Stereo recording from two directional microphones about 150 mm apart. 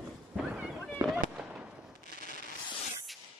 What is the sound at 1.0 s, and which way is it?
Fireworks, 25° right (ahead or behind).